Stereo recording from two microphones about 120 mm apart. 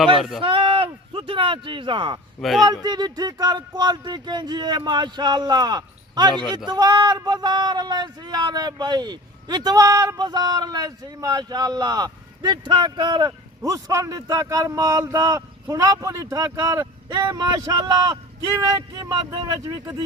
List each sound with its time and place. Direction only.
0.2 s speech: centre (ahead or behind)
0.4 s speech: 45° right (ahead or behind)
2.4 s speech: centre (ahead or behind)
2.8 s a man's voice: 35° right (ahead or behind)
19.7 s a man's voice: 20° right (ahead or behind)